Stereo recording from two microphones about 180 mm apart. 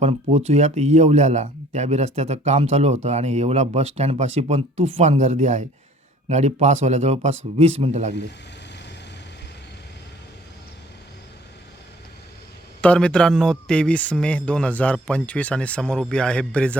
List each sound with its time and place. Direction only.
0.0 s speech: 35° right (ahead or behind)
12.8 s speech: 5° left (ahead or behind)